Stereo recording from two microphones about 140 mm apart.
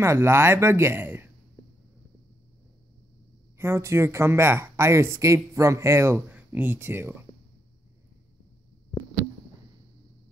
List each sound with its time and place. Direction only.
0.0 s speech: 20° right (ahead or behind)
3.5 s speech: 20° right (ahead or behind)